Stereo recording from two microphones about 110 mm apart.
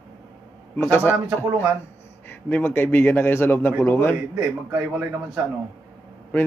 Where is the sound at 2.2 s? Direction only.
15° left (ahead or behind).